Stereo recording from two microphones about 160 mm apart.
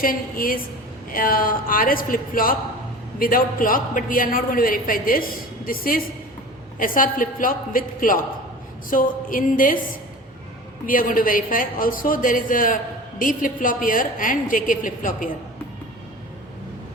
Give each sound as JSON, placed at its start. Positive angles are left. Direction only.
{"t": 0.0, "sound": "a woman's voice", "side_deg": 60}
{"t": 10.8, "sound": "a woman's voice", "side_deg": 60}